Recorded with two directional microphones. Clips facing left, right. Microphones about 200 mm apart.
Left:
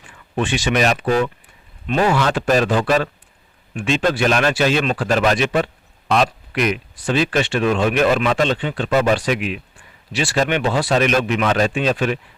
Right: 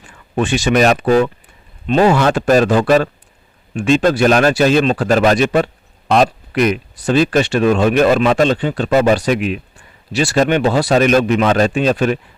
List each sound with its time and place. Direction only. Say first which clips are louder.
0.3 s speech: right 5 dB; 45° right (ahead or behind)
1.9 s speech: right 6 dB; 30° right (ahead or behind)
2.1 s speech: right 5 dB; 45° right (ahead or behind)